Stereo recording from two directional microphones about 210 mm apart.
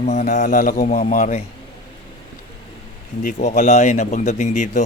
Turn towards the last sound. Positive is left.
turn(degrees=35)  # may be behind; listen again after turning